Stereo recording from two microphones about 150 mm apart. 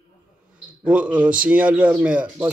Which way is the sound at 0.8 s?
10° right (ahead or behind).